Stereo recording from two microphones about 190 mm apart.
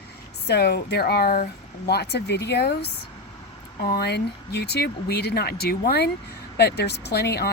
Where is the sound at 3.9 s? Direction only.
60° left (ahead or behind).